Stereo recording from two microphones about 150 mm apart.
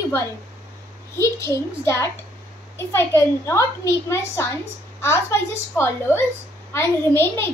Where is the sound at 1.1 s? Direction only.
20° left (ahead or behind).